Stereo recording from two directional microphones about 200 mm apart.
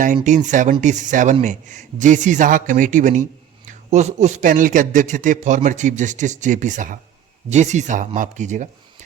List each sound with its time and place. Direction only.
0.3 s a man's voice: 40° right (ahead or behind)